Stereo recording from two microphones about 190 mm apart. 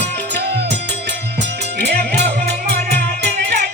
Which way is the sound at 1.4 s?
60° right (ahead or behind).